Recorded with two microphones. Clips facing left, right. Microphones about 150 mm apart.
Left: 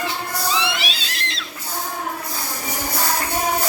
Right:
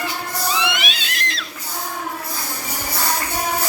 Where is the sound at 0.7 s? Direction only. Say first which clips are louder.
Right 1 dB; 30° left (ahead or behind).